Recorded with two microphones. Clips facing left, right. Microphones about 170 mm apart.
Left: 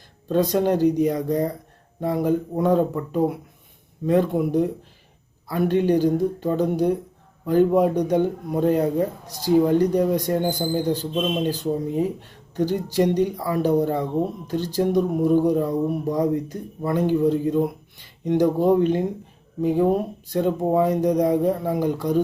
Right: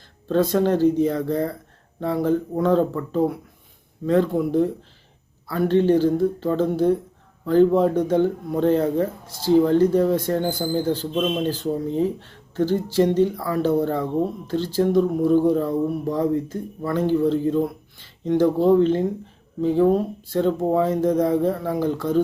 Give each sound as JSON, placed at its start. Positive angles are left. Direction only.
{"t": 0.3, "sound": "speech", "side_deg": 15}